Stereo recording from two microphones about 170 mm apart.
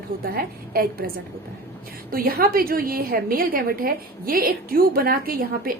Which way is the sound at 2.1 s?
60° right (ahead or behind).